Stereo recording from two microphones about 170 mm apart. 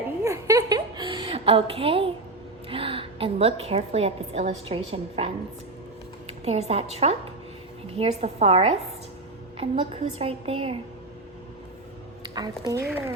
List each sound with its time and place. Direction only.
0.3 s a sound: 20° right (ahead or behind)
2.6 s a woman's voice: 30° right (ahead or behind)
12.2 s a woman's voice: 25° right (ahead or behind)